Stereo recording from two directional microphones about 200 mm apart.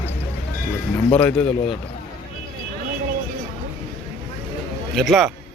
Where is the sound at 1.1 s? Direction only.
5° left (ahead or behind).